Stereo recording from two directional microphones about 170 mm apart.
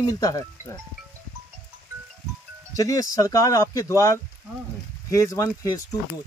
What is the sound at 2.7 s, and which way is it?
Speech, 20° left (ahead or behind).